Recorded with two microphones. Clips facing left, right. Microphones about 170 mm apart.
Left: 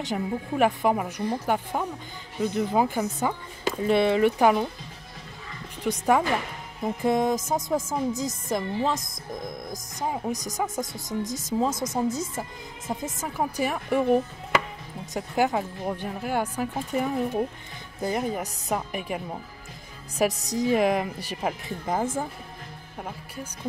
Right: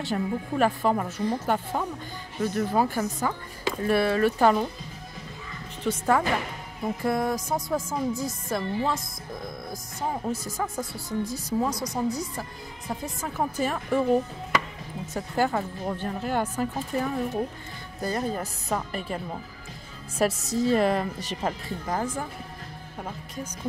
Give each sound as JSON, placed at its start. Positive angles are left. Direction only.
{"t": 0.0, "sound": "speech", "side_deg": 15}
{"t": 5.9, "sound": "speech", "side_deg": 15}
{"t": 21.6, "sound": "speech", "side_deg": 20}
{"t": 23.0, "sound": "speech", "side_deg": 10}